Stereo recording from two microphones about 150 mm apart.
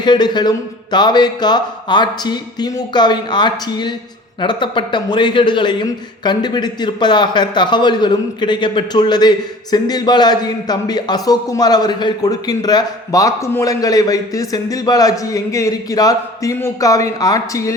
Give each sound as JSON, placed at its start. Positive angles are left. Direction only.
{"t": 0.0, "sound": "a man's voice", "side_deg": 30}